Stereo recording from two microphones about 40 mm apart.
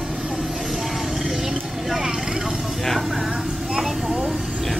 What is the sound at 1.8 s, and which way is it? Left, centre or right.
Vehicle, centre.